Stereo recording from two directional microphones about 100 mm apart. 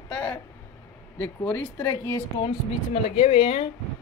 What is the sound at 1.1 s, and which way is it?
Speech, 20° left (ahead or behind).